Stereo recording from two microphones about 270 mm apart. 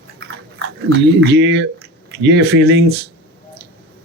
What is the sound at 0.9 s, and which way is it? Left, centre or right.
Speech, right.